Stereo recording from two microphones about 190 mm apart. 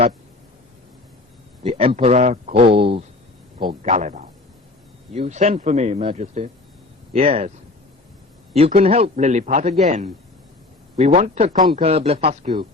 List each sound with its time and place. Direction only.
1.6 s a man's voice: 30° right (ahead or behind)
3.8 s a man's voice: 40° right (ahead or behind)
8.5 s a man's voice: 30° right (ahead or behind)